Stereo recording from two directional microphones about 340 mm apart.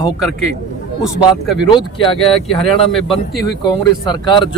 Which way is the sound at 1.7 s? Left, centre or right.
Centre.